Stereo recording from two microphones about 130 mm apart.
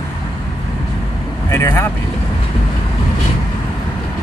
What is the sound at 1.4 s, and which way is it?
Speech, 20° left (ahead or behind).